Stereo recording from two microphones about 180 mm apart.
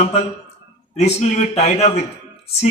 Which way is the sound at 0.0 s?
35° left (ahead or behind).